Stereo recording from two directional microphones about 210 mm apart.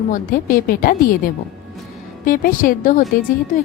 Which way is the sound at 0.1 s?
40° left (ahead or behind).